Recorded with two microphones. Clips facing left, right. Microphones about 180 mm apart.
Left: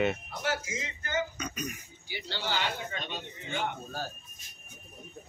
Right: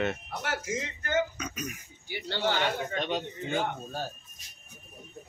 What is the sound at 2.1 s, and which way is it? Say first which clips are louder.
A man's voice: right 5 dB; 55° right (ahead or behind).